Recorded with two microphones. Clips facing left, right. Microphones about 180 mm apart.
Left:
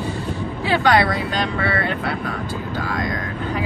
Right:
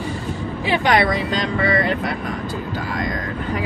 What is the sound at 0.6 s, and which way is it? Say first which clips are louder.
Speech: left 1 dB; 20° right (ahead or behind).